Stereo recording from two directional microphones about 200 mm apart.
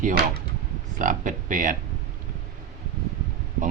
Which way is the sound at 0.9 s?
40° right (ahead or behind).